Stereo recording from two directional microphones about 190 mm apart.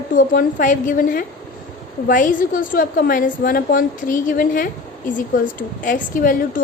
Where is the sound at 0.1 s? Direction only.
45° left (ahead or behind).